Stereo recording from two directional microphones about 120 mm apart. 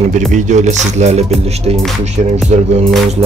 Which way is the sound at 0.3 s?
80° right.